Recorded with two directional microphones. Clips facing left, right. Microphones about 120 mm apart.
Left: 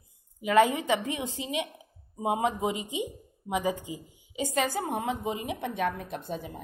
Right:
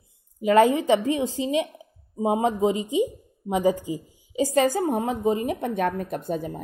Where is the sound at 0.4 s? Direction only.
35° right (ahead or behind).